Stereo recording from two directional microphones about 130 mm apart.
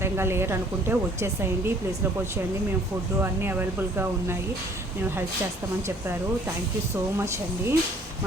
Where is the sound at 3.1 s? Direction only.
15° right (ahead or behind).